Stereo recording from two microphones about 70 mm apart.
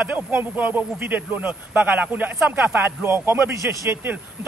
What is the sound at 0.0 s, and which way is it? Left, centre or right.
A man's voice, right.